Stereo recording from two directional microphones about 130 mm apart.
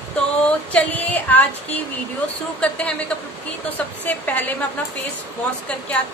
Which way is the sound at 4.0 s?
15° left (ahead or behind).